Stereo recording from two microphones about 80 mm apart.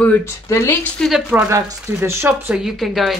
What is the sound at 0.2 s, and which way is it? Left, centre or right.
Speech, left.